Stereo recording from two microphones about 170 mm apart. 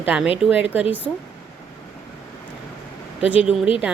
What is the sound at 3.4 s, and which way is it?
Speech, 5° right (ahead or behind).